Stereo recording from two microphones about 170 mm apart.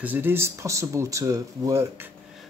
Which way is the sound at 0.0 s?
10° right (ahead or behind).